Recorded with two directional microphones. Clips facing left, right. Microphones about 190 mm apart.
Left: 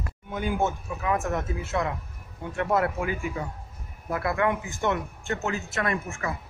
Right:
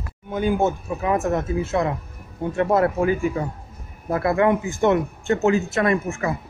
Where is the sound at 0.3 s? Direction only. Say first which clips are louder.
Right 6 dB; 30° right (ahead or behind).